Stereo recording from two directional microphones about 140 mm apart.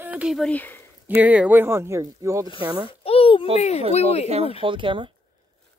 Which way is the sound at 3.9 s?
50° left (ahead or behind).